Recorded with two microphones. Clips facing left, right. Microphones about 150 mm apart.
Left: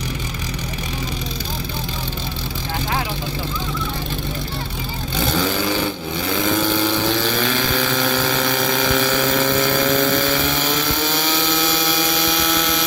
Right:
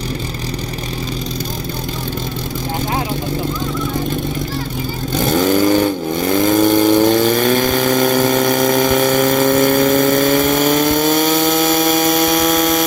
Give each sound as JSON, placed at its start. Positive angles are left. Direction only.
{"t": 5.2, "sound": "vehicle", "side_deg": -50}